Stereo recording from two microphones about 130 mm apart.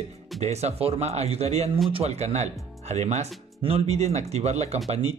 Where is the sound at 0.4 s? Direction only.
55° right (ahead or behind).